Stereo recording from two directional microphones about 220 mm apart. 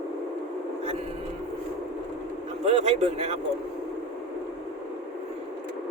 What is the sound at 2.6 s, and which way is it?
Speech, 30° right (ahead or behind).